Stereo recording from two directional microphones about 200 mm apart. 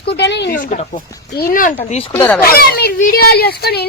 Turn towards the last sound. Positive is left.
turn(degrees=55)  # may be behind; listen again after turning